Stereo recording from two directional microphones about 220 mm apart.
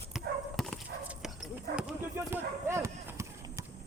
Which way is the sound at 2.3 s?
10° right (ahead or behind).